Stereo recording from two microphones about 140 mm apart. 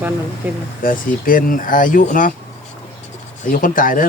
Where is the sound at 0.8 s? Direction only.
80° left.